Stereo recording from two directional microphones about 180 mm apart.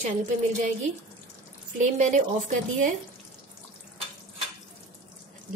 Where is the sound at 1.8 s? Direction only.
45° right (ahead or behind).